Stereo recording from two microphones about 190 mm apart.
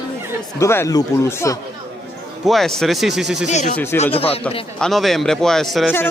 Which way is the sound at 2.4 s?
Centre (ahead or behind).